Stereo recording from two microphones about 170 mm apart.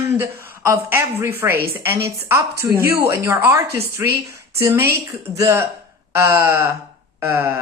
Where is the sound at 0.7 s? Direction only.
15° right (ahead or behind).